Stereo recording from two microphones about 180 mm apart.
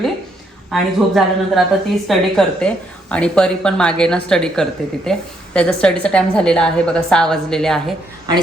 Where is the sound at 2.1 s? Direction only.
Centre (ahead or behind).